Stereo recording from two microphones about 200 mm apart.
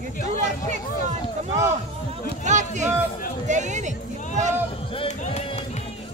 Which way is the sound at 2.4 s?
35° right (ahead or behind).